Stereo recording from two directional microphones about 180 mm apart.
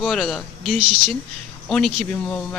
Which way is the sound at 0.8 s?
25° right (ahead or behind).